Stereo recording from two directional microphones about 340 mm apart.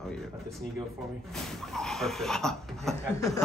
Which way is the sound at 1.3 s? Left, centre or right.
Centre.